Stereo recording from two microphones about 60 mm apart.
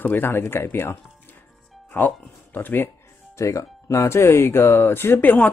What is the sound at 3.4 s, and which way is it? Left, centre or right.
Speech, left.